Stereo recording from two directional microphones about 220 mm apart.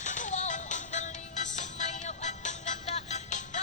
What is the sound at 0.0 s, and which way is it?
Music, 35° left (ahead or behind).